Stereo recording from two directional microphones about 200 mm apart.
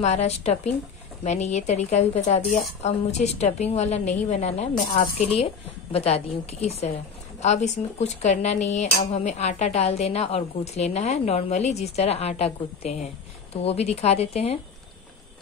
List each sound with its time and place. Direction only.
0.0 s a woman's voice: 35° left (ahead or behind)